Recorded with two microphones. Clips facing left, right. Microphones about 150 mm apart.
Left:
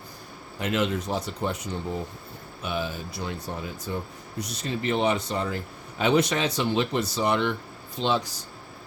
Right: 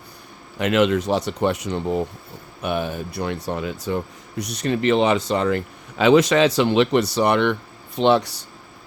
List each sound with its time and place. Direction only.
0.6 s speech: 90° right
2.6 s speech: 60° right (ahead or behind)